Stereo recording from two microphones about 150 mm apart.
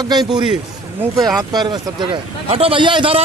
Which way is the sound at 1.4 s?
25° right (ahead or behind).